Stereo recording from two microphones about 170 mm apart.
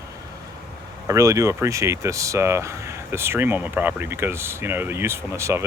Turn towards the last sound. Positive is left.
turn(degrees=-15)  # may be behind; listen again after turning